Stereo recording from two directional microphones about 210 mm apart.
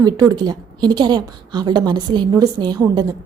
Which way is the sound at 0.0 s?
20° right (ahead or behind).